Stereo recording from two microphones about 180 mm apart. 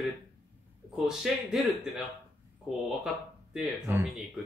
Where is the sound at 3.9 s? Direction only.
10° right (ahead or behind).